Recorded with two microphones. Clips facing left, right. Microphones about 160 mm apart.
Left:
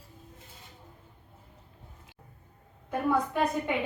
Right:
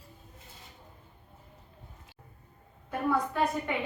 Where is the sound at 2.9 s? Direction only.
15° left (ahead or behind).